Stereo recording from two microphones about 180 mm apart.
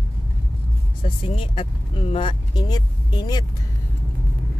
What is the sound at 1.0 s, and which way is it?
Speech, 30° left (ahead or behind).